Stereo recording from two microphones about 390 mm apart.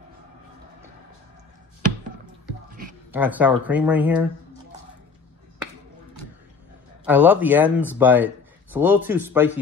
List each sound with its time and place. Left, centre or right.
2.7 s a sound: right
3.1 s speech: centre
7.1 s speech: centre